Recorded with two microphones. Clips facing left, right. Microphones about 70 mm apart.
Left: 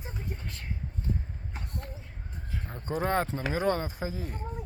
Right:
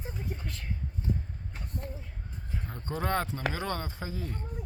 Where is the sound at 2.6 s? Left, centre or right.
Centre.